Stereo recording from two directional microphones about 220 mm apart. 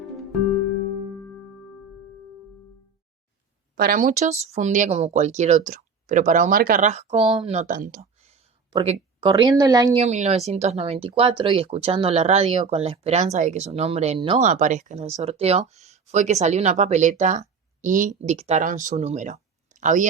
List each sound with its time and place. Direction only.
3.8 s speech: 40° right (ahead or behind); by 10.0 s 15° right (ahead or behind)
10.0 s speech: 30° right (ahead or behind)